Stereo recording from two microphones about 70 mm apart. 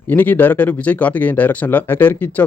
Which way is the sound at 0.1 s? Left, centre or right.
Left.